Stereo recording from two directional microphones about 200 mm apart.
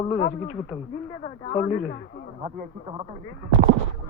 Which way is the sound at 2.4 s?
30° right (ahead or behind).